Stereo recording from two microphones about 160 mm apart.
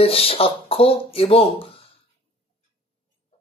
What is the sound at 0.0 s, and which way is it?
Speech, 35° left (ahead or behind).